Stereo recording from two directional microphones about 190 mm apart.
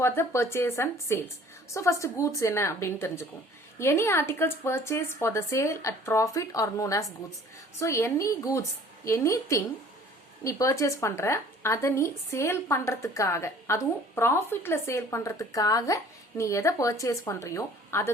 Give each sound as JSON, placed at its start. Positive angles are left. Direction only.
{"t": 0.0, "sound": "a woman's voice", "side_deg": 15}